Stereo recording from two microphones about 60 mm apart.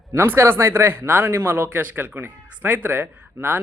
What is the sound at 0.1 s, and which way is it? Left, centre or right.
A man's voice, right.